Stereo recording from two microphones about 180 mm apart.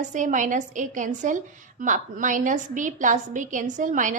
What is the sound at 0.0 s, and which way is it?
A woman's voice, 45° right (ahead or behind).